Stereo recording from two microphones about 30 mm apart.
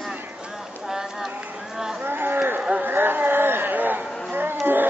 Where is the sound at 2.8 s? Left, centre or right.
Right.